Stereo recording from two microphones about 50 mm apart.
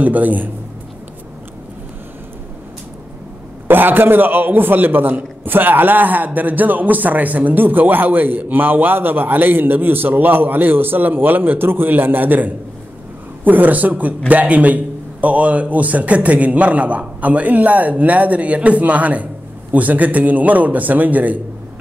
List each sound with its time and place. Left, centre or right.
0.0 s a man's voice: right
3.6 s a man's voice: right